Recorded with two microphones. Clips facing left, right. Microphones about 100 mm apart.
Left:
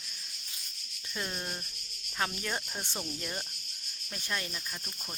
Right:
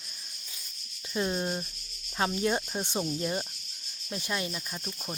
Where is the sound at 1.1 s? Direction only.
20° right (ahead or behind).